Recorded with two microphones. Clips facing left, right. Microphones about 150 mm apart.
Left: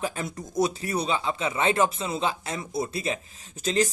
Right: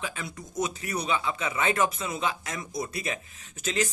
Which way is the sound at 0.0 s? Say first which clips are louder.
Left 6 dB; 40° left (ahead or behind).